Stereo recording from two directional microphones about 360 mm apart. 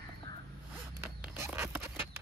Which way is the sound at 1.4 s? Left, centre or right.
Centre.